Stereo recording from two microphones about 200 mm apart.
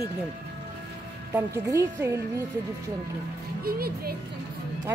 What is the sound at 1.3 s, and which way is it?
Speech, 15° right (ahead or behind).